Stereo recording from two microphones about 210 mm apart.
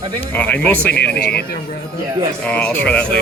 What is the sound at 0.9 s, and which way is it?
Speech, 50° left (ahead or behind).